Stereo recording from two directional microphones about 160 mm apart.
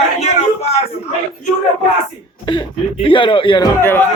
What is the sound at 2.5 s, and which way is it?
Speech, 30° left (ahead or behind).